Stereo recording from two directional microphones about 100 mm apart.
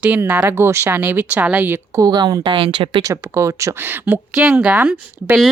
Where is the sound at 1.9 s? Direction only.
40° right (ahead or behind); by 3.0 s 55° right (ahead or behind).